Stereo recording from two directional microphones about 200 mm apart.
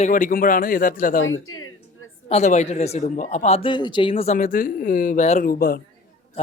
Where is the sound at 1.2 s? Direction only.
80° left.